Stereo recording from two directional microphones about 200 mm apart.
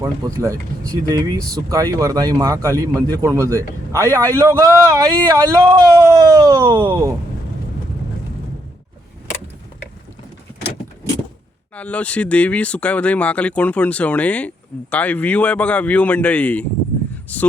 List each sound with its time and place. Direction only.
0.0 s speech: 15° right (ahead or behind)
11.7 s speech: 5° left (ahead or behind)